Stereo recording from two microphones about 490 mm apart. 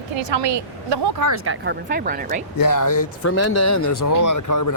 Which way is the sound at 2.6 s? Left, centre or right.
Left.